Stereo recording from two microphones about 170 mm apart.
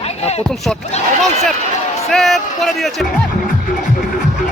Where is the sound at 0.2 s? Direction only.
40° left (ahead or behind).